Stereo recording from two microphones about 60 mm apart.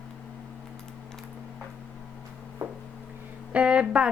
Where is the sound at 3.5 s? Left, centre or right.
Centre.